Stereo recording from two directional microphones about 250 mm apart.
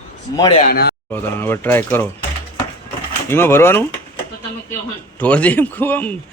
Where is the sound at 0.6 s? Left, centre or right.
Left.